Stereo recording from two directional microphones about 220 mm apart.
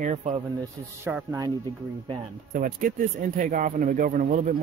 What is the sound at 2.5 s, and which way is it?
Speech, 40° right (ahead or behind).